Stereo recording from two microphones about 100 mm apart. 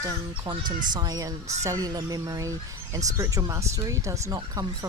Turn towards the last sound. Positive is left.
turn(degrees=-40)  # may be behind; listen again after turning